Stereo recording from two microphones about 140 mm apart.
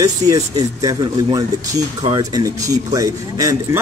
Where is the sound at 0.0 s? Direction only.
25° right (ahead or behind).